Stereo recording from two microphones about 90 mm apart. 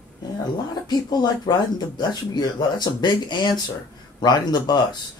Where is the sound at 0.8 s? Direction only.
50° left (ahead or behind).